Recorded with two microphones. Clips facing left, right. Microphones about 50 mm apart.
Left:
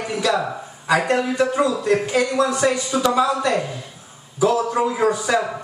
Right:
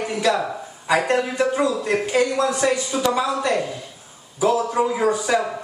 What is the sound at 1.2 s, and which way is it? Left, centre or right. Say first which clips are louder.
A man's voice: left 1 dB; centre.